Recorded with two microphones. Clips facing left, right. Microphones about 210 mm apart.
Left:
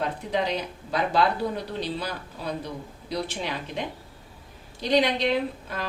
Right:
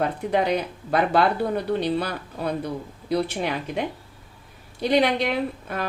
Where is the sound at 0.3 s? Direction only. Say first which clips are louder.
Right 5 dB; 55° right (ahead or behind).